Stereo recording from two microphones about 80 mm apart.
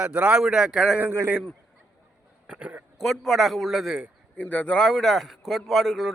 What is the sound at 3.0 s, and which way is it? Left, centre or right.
A man's voice, centre.